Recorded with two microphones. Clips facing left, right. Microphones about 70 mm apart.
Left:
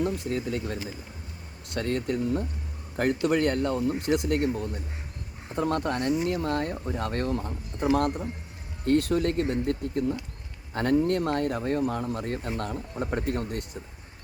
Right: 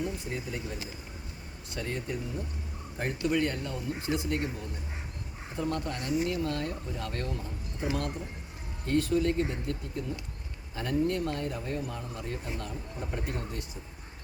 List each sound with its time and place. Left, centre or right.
0.0 s speech: left
3.0 s speech: left